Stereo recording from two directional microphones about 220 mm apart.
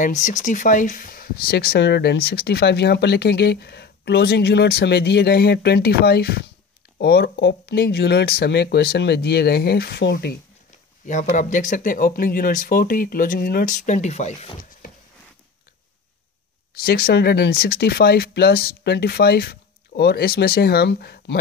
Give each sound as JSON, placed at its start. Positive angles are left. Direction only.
{"t": 0.0, "sound": "speech", "side_deg": 35}
{"t": 11.1, "sound": "speech", "side_deg": 35}
{"t": 16.7, "sound": "speech", "side_deg": 45}